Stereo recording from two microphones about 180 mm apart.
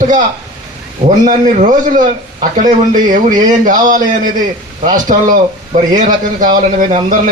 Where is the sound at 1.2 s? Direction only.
45° right (ahead or behind).